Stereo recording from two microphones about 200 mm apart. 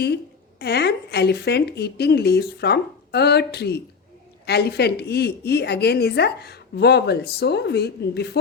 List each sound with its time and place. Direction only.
0.6 s a woman's voice: 55° left (ahead or behind)